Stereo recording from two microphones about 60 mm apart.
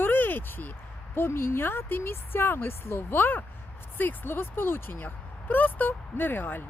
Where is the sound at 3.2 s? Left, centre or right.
Left.